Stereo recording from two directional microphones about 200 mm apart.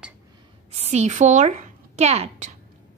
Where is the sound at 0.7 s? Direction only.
35° right (ahead or behind).